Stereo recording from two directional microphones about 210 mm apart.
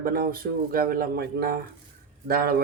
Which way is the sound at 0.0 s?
45° right (ahead or behind).